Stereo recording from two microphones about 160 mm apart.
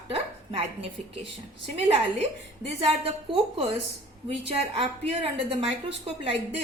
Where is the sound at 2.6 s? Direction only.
40° right (ahead or behind).